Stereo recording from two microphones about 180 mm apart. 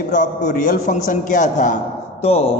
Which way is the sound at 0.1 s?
45° left (ahead or behind).